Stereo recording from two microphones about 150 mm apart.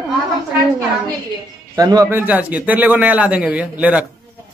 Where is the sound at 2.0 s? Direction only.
10° right (ahead or behind).